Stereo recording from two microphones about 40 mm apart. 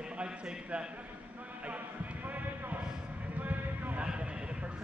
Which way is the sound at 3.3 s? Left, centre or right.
Right.